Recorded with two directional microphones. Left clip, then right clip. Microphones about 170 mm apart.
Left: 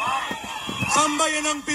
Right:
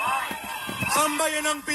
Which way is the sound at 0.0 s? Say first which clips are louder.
Left 1 dB; 30° left (ahead or behind).